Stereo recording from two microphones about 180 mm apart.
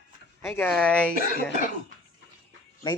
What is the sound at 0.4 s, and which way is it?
Speech, 10° left (ahead or behind).